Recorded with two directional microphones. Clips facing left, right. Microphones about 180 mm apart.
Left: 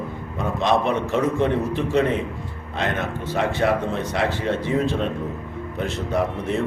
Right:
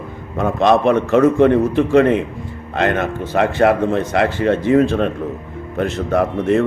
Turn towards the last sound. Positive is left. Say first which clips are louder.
# right 7 dB
turn(degrees=-60)  # may be behind; listen again after turning